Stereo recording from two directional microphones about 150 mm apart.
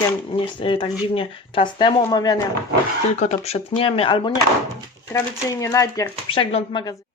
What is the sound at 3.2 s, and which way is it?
Speech, 45° left (ahead or behind).